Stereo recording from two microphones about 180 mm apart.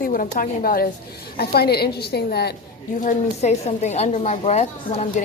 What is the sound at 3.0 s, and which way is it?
A woman's voice, 40° left (ahead or behind).